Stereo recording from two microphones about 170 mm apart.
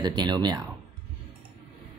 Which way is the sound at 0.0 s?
25° right (ahead or behind).